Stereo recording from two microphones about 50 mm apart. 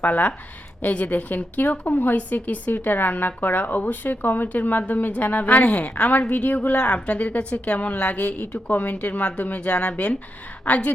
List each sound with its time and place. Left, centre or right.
0.0 s a woman's voice: left